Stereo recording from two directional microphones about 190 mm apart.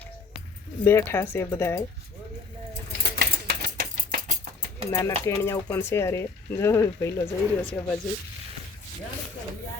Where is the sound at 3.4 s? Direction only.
50° right (ahead or behind).